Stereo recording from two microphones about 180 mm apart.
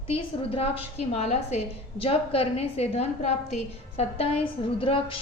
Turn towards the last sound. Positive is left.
turn(degrees=30)  # may be behind; listen again after turning